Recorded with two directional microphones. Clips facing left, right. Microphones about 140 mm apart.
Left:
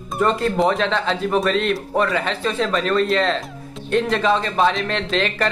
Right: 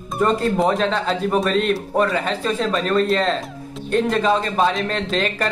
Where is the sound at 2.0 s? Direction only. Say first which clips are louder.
Even; 35° right (ahead or behind).